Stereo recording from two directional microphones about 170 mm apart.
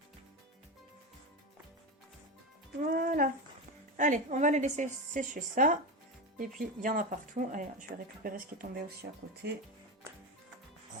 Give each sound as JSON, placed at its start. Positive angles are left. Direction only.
{"t": 2.8, "sound": "music", "side_deg": -55}
{"t": 3.9, "sound": "speech", "side_deg": -45}